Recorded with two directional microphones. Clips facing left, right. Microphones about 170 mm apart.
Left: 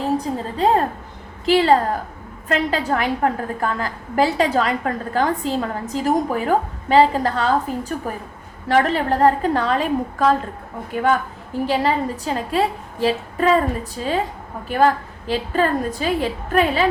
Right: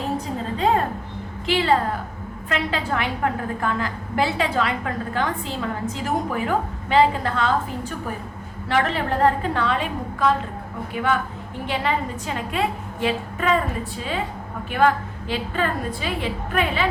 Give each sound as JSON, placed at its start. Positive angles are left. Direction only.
{"t": 1.5, "sound": "a woman's voice", "side_deg": 40}